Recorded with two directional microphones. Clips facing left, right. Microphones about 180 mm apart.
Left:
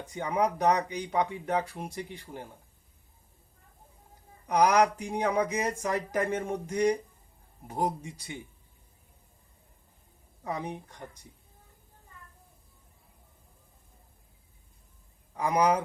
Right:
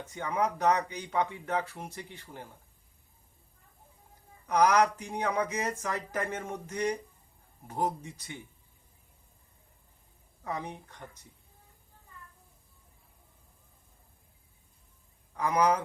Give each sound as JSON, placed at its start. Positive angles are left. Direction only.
{"t": 0.0, "sound": "speech", "side_deg": 15}
{"t": 4.4, "sound": "speech", "side_deg": 15}
{"t": 10.4, "sound": "speech", "side_deg": 15}
{"t": 15.4, "sound": "speech", "side_deg": 10}